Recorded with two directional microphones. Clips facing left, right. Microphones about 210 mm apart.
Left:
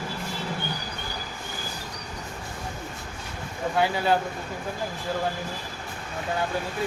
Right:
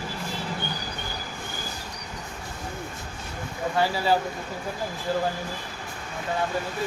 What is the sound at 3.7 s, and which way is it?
Speech, centre (ahead or behind).